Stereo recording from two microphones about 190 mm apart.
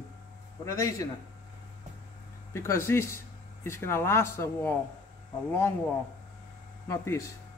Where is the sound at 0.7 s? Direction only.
15° left (ahead or behind).